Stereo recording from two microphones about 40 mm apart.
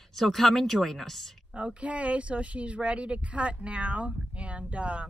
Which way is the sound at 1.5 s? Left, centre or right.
Right.